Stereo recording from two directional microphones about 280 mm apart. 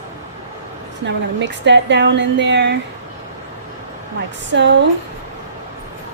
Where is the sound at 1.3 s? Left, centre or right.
Right.